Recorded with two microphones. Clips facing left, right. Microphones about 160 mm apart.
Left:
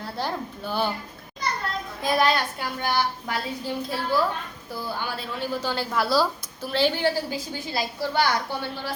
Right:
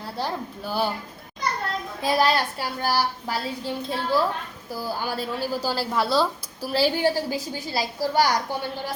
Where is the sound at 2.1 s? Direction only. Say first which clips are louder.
Right 1 dB; 30° right (ahead or behind).